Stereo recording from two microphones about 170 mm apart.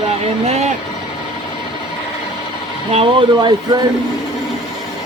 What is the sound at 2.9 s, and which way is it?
Speech, 35° right (ahead or behind).